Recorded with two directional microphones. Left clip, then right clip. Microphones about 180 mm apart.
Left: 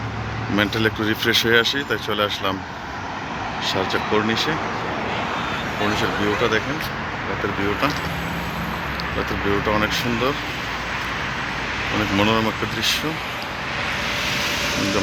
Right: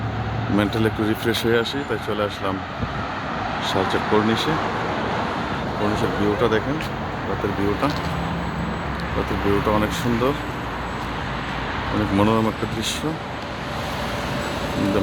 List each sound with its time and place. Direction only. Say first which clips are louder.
0.5 s speech: left 1 dB; 5° right (ahead or behind)
3.8 s speech: right 1 dB; 15° left (ahead or behind)
6.0 s speech: right 1 dB; 15° right (ahead or behind)
12.1 s speech: even; 10° right (ahead or behind)